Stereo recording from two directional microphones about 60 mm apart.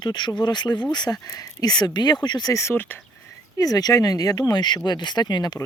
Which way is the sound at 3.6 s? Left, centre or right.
Left.